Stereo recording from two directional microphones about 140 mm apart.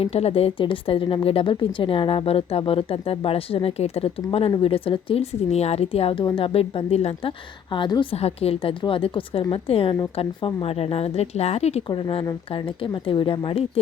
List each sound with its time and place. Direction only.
0.0 s a woman's voice: 50° left (ahead or behind)
8.1 s a woman's voice: 45° left (ahead or behind)
11.9 s a woman's voice: 35° left (ahead or behind)